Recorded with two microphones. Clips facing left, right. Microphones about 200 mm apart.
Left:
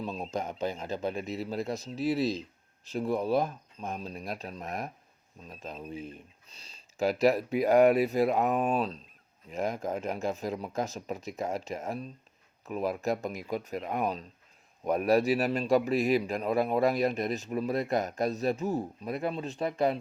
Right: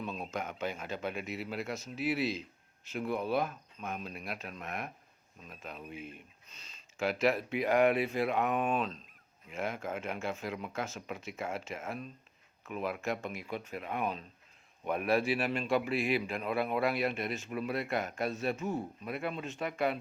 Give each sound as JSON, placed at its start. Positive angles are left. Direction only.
{"t": 0.0, "sound": "a man's voice", "side_deg": 35}